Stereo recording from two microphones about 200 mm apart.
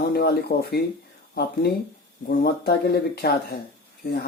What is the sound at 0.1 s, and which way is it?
Speech, 55° left (ahead or behind).